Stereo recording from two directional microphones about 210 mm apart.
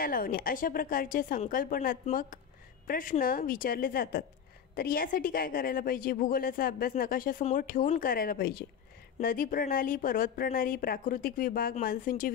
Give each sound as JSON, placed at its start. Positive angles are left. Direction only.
{"t": 0.0, "sound": "a woman's voice", "side_deg": 40}